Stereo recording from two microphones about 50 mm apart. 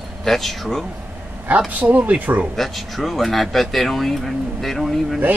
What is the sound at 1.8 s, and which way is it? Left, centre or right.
Speech, right.